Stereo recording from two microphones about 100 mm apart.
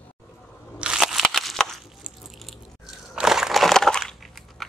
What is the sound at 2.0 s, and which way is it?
Biting, centre (ahead or behind).